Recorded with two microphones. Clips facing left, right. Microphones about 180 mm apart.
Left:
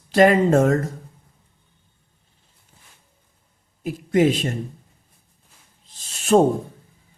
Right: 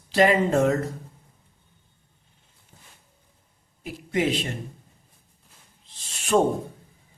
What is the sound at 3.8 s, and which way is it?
Speech, 45° left (ahead or behind).